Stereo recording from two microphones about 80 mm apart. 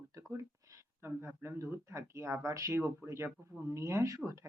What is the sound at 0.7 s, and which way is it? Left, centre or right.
Speech, right.